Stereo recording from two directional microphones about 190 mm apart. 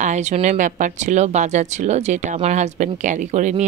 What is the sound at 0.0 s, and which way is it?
Speech, 35° right (ahead or behind).